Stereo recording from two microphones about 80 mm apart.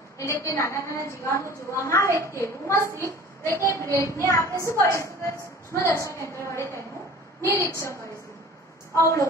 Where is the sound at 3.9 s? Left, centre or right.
Left.